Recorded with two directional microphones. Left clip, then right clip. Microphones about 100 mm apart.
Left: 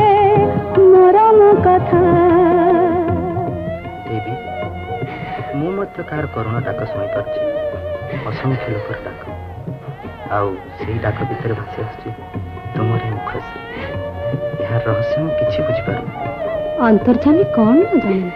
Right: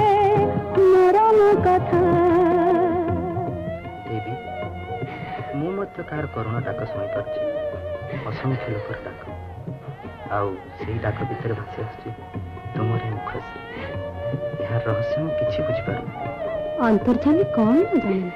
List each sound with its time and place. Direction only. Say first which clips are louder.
0.0 s music: left 6 dB; 35° left (ahead or behind)
10.3 s speech: left 6 dB; 35° left (ahead or behind)
12.7 s music: left 6 dB; 35° left (ahead or behind)
14.0 s speech: left 6 dB; 35° left (ahead or behind)